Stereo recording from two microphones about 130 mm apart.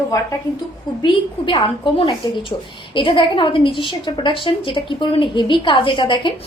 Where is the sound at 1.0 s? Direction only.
40° left (ahead or behind).